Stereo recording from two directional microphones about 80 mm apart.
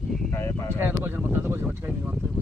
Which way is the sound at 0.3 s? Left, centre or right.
Left.